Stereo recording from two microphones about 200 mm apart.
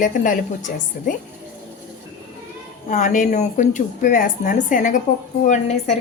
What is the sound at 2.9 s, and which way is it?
A woman's voice, 40° left (ahead or behind).